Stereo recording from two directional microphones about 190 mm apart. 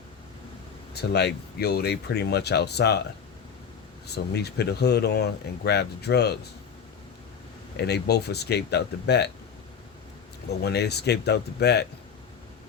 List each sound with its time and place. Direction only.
1.1 s speech: 60° left (ahead or behind)
4.0 s speech: 60° left (ahead or behind)
7.8 s speech: 60° left (ahead or behind)
10.6 s speech: 60° left (ahead or behind)